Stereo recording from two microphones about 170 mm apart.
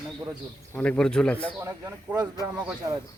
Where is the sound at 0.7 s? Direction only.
5° left (ahead or behind).